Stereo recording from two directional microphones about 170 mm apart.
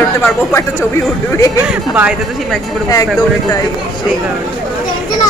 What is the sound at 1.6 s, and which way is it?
Speech, 5° right (ahead or behind).